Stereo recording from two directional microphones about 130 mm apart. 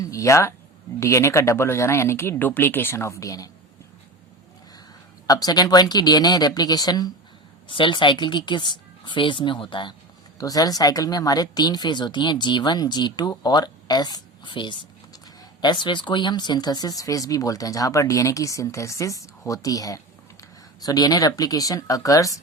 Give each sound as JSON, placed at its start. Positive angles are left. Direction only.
{"t": 0.0, "sound": "speech", "side_deg": 25}
{"t": 5.2, "sound": "speech", "side_deg": 30}
{"t": 10.3, "sound": "speech", "side_deg": 30}